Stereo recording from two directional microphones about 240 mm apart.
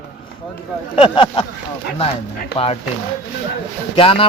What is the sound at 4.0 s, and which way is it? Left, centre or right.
Speech, left.